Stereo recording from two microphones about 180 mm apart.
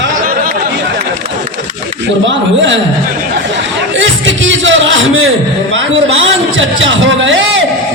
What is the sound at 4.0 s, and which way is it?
Music, 90° right.